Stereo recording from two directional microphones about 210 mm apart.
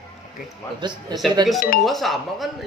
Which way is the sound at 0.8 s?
20° right (ahead or behind).